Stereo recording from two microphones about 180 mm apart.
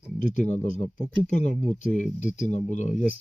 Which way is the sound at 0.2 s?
40° left (ahead or behind).